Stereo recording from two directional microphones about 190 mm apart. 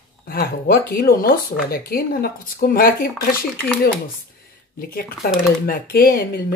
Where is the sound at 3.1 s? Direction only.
5° left (ahead or behind).